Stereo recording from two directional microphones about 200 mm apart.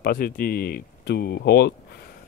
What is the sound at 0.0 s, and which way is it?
Speech, 45° left (ahead or behind).